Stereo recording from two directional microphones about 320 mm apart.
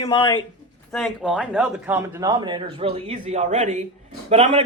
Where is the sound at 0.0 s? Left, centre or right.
Centre.